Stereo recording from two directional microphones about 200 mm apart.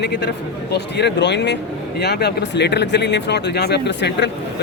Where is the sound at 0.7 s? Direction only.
60° left (ahead or behind).